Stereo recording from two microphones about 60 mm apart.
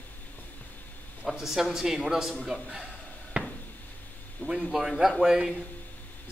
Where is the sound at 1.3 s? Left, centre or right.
Centre.